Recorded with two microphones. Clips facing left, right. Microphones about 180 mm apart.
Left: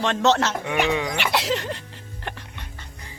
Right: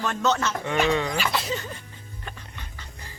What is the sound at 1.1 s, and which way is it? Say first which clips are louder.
Speech: left 3 dB; 70° left (ahead or behind).